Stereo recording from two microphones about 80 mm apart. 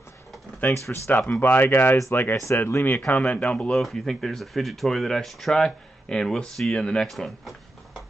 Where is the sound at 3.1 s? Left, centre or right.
Centre.